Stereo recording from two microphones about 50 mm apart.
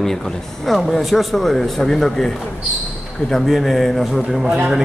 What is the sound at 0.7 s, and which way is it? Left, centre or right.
A man's voice, centre.